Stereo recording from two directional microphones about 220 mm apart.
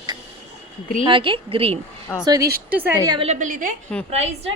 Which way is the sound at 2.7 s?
10° right (ahead or behind).